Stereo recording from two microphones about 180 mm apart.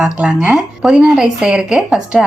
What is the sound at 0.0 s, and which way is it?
A woman's voice, 5° right (ahead or behind).